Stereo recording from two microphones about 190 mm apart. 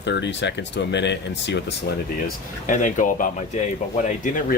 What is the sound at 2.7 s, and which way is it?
Speech, 40° left (ahead or behind).